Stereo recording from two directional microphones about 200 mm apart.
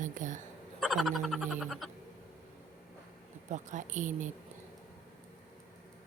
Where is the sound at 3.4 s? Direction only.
40° right (ahead or behind).